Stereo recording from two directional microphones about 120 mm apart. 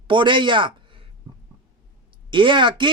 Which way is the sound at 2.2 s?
45° right (ahead or behind).